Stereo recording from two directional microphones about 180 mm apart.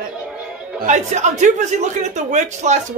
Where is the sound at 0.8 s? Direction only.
40° right (ahead or behind).